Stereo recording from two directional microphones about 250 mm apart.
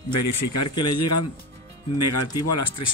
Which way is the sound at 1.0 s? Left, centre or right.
Left.